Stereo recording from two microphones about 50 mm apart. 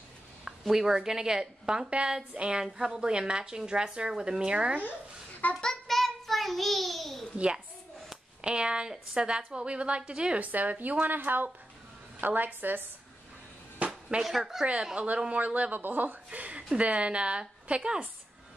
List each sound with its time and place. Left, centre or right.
0.5 s a woman's voice: centre
5.4 s child singing: left
5.9 s child singing: centre
7.3 s a woman's voice: centre
10.4 s a woman's voice: right
14.0 s a woman's voice: centre
15.0 s a woman's voice: right
16.3 s a woman's voice: right